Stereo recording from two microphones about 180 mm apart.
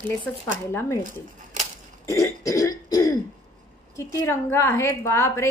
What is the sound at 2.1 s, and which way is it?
Speech, 20° left (ahead or behind).